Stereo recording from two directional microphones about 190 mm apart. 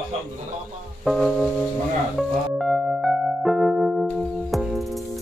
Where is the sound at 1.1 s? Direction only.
Centre (ahead or behind).